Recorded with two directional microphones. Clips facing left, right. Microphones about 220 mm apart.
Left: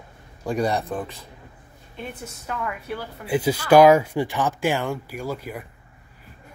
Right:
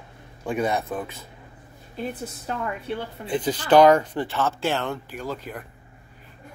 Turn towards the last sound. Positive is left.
turn(degrees=10)  # may be behind; listen again after turning